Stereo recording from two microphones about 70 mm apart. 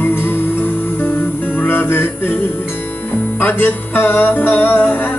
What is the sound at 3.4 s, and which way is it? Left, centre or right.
Music, left.